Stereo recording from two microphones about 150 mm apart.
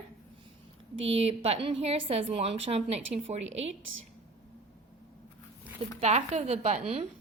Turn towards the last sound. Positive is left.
turn(degrees=-45)  # may be behind; listen again after turning